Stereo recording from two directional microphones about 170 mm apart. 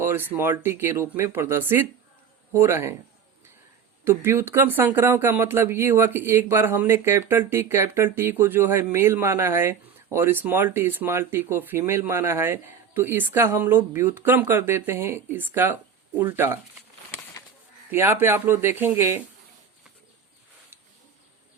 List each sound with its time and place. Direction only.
0.0 s speech: 10° right (ahead or behind)
4.0 s speech: 15° right (ahead or behind)
17.9 s speech: 15° right (ahead or behind)